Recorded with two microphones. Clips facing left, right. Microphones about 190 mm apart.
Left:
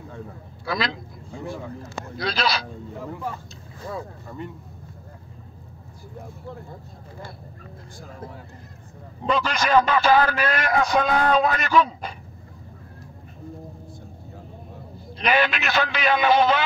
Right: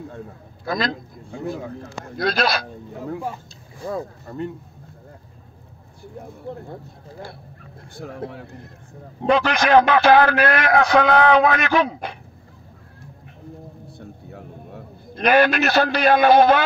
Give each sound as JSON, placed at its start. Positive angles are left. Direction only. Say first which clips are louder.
{"t": 0.7, "sound": "a man's voice", "louder": "right 3 dB", "side_deg": -45}
{"t": 3.8, "sound": "a man's voice", "louder": "right 5 dB", "side_deg": -45}
{"t": 8.0, "sound": "a man's voice", "louder": "right 8 dB", "side_deg": -65}
{"t": 13.9, "sound": "a sound", "louder": "right 4 dB", "side_deg": -65}
{"t": 15.2, "sound": "a man's voice", "louder": "right 6 dB", "side_deg": -45}